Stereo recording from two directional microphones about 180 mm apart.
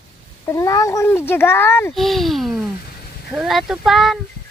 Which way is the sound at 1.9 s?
Centre (ahead or behind).